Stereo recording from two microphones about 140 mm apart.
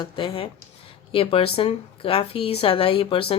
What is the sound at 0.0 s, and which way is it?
Speech, 35° left (ahead or behind).